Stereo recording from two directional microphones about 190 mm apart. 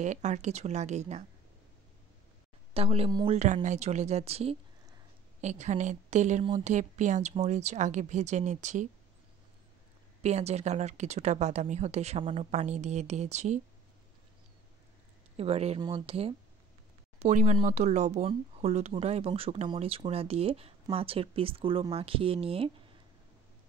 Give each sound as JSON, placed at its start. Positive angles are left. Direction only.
{"t": 0.0, "sound": "speech", "side_deg": -40}
{"t": 2.7, "sound": "speech", "side_deg": -30}
{"t": 3.3, "sound": "speech", "side_deg": -40}
{"t": 10.2, "sound": "speech", "side_deg": -35}
{"t": 15.3, "sound": "speech", "side_deg": -35}